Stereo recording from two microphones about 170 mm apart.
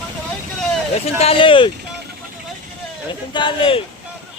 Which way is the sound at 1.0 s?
35° left (ahead or behind).